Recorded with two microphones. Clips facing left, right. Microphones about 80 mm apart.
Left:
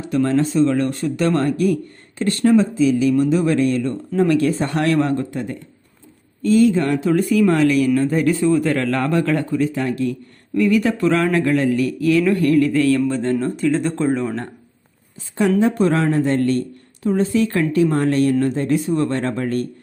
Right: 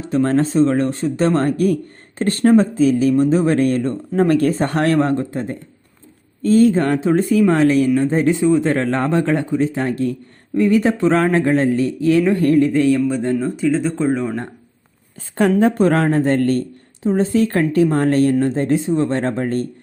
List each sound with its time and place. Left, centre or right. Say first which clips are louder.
0.0 s speech: right 1 dB; right
7.9 s speech: right 1 dB; centre
15.4 s speech: right 2 dB; right
17.0 s speech: right 2 dB; right